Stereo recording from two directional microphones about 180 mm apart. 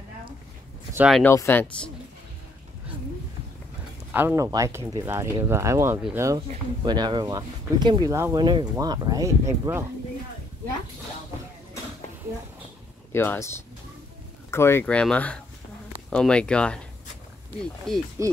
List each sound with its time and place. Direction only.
0.9 s speech: 5° right (ahead or behind)
1.2 s speech: 15° left (ahead or behind)
4.1 s speech: 10° right (ahead or behind)
13.1 s speech: 10° left (ahead or behind)
17.9 s speech: centre (ahead or behind)